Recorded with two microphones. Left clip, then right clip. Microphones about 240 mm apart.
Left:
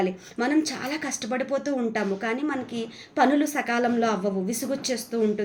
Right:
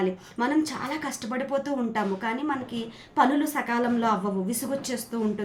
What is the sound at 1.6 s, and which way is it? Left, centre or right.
A woman's voice, right.